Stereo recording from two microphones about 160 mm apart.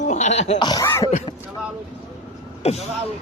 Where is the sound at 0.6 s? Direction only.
25° left (ahead or behind).